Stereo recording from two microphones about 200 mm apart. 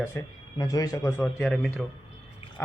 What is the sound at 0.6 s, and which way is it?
Speech, 20° left (ahead or behind).